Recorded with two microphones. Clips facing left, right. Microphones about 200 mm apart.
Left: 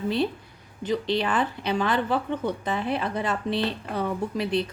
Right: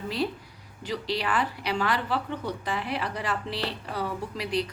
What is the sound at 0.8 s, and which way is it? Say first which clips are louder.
A woman's voice: left 5 dB; 20° left (ahead or behind).